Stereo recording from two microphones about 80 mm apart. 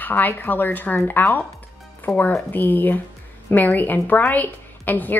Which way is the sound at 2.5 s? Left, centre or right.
Left.